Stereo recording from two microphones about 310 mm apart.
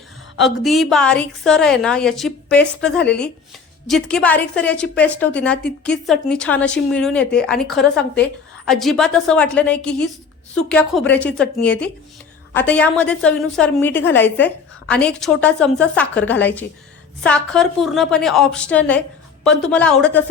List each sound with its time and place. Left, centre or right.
0.3 s a woman's voice: centre